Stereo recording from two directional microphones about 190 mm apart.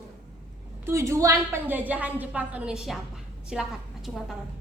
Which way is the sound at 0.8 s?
15° right (ahead or behind).